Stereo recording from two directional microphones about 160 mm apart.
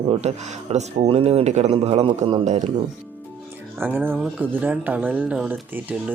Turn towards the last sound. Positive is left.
turn(degrees=-5)  # may be behind; listen again after turning